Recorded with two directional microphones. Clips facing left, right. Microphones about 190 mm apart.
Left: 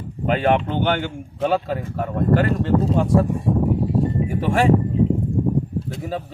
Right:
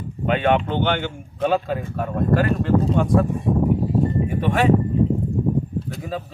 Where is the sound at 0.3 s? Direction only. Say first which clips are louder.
Even; 35° left (ahead or behind).